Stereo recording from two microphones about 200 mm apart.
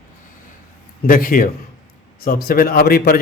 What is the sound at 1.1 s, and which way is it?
A man's voice, 45° left (ahead or behind).